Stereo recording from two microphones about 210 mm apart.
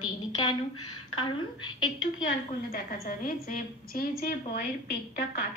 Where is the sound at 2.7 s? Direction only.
40° left (ahead or behind).